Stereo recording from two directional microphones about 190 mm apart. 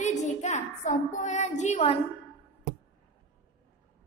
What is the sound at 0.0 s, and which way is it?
Speech, 40° left (ahead or behind).